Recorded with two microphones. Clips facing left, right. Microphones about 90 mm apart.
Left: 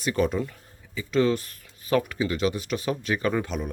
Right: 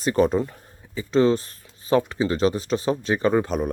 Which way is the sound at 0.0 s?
35° right (ahead or behind).